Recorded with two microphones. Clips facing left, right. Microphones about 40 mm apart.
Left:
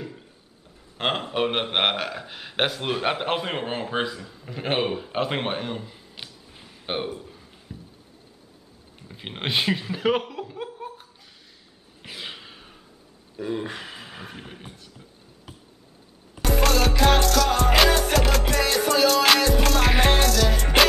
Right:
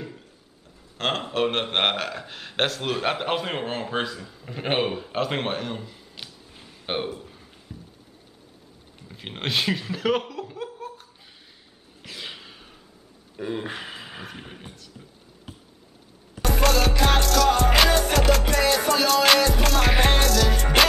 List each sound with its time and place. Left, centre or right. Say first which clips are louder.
0.9 s a man's voice: even; centre
5.8 s a sound: left 1 dB; centre
7.1 s speech: even; centre
7.7 s a sound: left 1 dB; centre
9.0 s speech: even; centre
10.8 s laughter: even; centre
12.0 s a sound: left 1 dB; centre
13.4 s a man's voice: left 1 dB; centre
16.3 s music: even; centre